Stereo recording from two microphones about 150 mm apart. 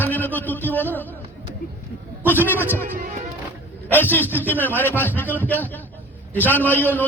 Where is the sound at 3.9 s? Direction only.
15° left (ahead or behind).